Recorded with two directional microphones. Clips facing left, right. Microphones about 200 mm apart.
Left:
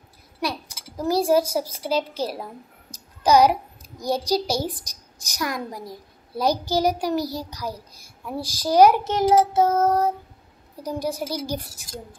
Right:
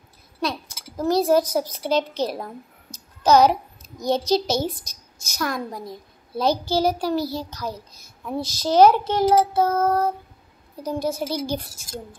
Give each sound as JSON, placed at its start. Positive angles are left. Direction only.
{"t": 0.4, "sound": "speech", "side_deg": 10}
{"t": 2.9, "sound": "a sound", "side_deg": 30}
{"t": 3.3, "sound": "a child's voice", "side_deg": 10}
{"t": 9.1, "sound": "child singing", "side_deg": 20}
{"t": 10.8, "sound": "a child's voice", "side_deg": 15}